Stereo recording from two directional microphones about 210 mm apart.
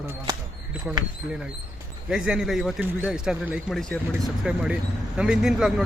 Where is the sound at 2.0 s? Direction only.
5° right (ahead or behind).